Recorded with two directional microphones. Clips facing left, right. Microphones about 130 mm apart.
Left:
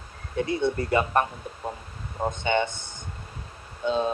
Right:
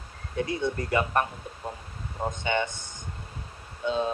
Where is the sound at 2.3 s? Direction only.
30° left (ahead or behind).